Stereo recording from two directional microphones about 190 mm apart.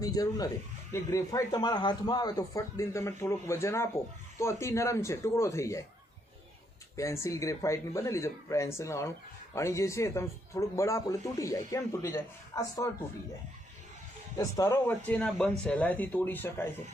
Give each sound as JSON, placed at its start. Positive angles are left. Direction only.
{"t": 0.0, "sound": "a man's voice", "side_deg": 20}
{"t": 6.9, "sound": "a man's voice", "side_deg": 15}
{"t": 14.3, "sound": "a man's voice", "side_deg": 15}